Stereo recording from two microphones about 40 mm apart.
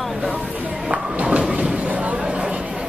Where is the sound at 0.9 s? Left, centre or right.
Right.